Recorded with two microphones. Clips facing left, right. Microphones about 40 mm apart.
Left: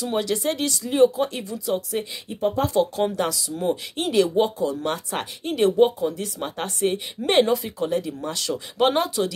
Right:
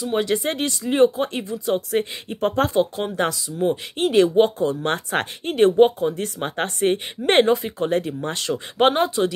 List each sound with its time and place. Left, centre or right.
0.0 s speech: right
2.4 s speech: right
3.2 s speech: right